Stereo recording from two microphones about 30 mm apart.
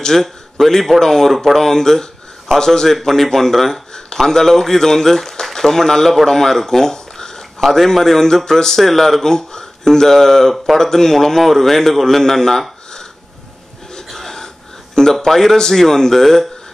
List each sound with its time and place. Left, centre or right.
0.1 s a man's voice: centre
1.6 s speech: centre
7.6 s speech: centre
14.1 s a sound: centre
15.1 s speech: centre